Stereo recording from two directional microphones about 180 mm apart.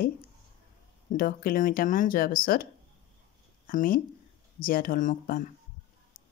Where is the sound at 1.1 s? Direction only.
55° left (ahead or behind).